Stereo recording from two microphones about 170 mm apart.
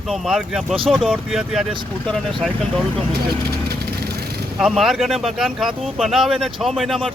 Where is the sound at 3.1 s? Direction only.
70° right (ahead or behind).